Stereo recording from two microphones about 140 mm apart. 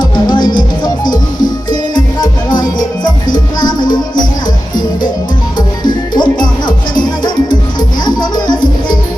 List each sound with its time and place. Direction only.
0.0 s music: 30° left (ahead or behind)
3.3 s music: 30° left (ahead or behind)
5.5 s music: 30° left (ahead or behind)
7.8 s music: 30° left (ahead or behind)